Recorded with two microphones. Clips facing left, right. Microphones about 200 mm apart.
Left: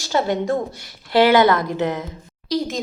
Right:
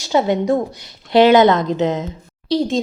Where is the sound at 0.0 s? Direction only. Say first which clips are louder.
Right 4 dB; 20° right (ahead or behind).